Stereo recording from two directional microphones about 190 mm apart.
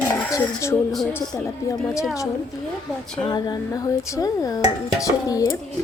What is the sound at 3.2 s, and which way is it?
Speech, 20° left (ahead or behind).